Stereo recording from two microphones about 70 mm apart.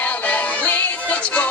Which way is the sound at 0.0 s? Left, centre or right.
Left.